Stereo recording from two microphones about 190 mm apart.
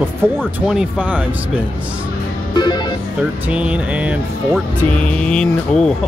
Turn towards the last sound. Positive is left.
turn(degrees=5)  # may be behind; listen again after turning